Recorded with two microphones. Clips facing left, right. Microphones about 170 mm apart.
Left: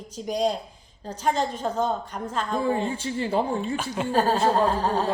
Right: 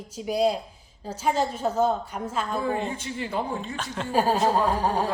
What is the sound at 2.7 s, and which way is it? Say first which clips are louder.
Speech: left 3 dB; 30° left (ahead or behind).